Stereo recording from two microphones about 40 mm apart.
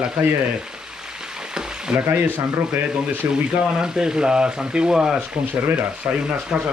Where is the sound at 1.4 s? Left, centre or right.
Centre.